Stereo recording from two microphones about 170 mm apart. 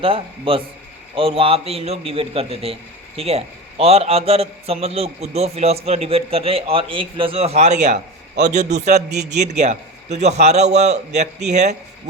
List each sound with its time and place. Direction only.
0.0 s a man's voice: 30° right (ahead or behind)